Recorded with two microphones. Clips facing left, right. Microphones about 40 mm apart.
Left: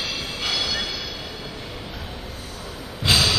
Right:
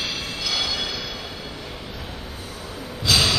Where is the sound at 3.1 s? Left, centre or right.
Left.